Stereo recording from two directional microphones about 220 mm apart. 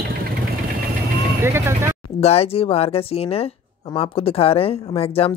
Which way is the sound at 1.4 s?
10° right (ahead or behind).